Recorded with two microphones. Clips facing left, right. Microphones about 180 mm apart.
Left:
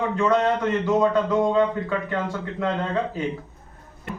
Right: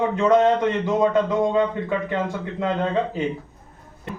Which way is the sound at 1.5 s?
20° right (ahead or behind).